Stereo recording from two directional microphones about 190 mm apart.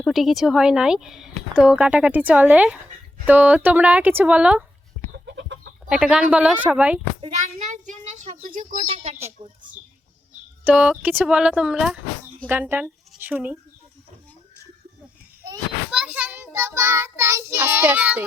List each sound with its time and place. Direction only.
0.0 s speech: centre (ahead or behind)
5.1 s chicken: 70° right (ahead or behind)
5.9 s speech: 5° right (ahead or behind)
7.2 s a sound: 40° right (ahead or behind)
10.6 s a woman's voice: 10° right (ahead or behind)
15.9 s child singing: 5° right (ahead or behind)